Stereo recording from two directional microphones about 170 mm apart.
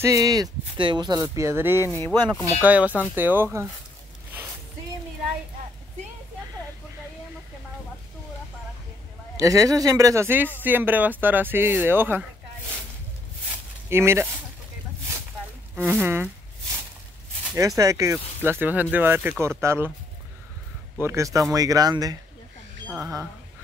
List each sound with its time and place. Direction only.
0.0 s speech: 20° right (ahead or behind)
1.9 s speech: 15° left (ahead or behind)
2.6 s speech: 10° right (ahead or behind)
9.4 s speech: 20° right (ahead or behind)
13.8 s speech: 15° right (ahead or behind)
15.9 s speech: 10° right (ahead or behind)
17.6 s speech: 20° right (ahead or behind)
21.0 s speech: 15° right (ahead or behind)